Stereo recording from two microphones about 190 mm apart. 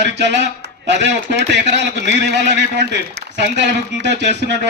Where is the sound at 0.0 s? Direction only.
65° right (ahead or behind).